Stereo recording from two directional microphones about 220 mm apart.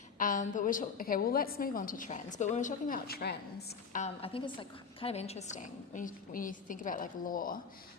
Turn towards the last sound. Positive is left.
turn(degrees=40)  # may be behind; listen again after turning